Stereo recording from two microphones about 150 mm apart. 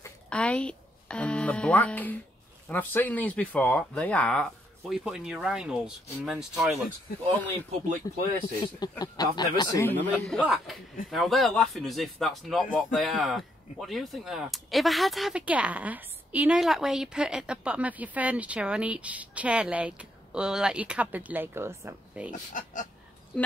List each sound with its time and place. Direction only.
0.3 s speech: 5° left (ahead or behind)
8.7 s speech: 25° left (ahead or behind)
9.8 s speech: 10° left (ahead or behind); by 22.3 s 15° right (ahead or behind)
22.5 s speech: 60° left (ahead or behind)